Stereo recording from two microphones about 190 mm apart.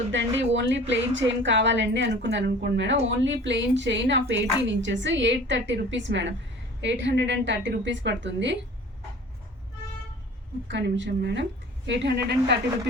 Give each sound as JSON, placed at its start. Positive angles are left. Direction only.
{"t": 0.1, "sound": "a woman's voice", "side_deg": -70}
{"t": 10.7, "sound": "a woman's voice", "side_deg": -70}